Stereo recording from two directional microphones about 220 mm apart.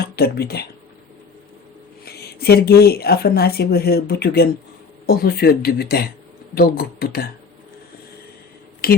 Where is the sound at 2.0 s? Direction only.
45° left (ahead or behind).